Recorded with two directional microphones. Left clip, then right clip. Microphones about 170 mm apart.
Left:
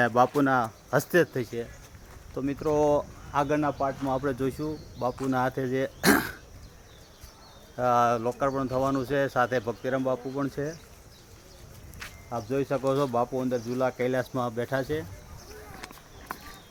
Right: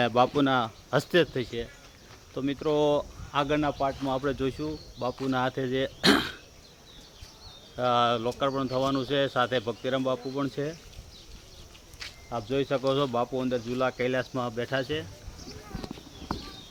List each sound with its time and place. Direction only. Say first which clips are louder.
0.0 s speech: left 1 dB; 5° left (ahead or behind)
7.8 s speech: left 1 dB; 10° left (ahead or behind)
11.9 s a sound: even; centre (ahead or behind)
12.5 s speech: even; 15° left (ahead or behind); by 15.0 s 35° left (ahead or behind)